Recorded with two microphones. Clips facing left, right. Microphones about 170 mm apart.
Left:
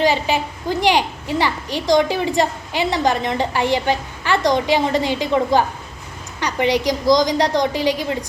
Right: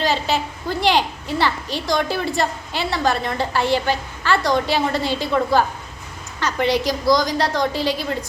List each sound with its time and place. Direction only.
0.0 s a woman's voice: 15° left (ahead or behind)